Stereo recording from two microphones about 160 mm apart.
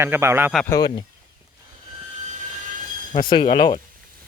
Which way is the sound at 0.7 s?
25° left (ahead or behind).